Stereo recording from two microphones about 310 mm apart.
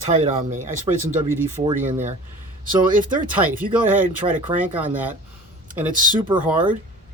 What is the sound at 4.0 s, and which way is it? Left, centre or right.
Speech, right.